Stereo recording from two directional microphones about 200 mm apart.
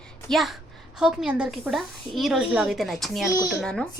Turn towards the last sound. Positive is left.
turn(degrees=5)  # may be behind; listen again after turning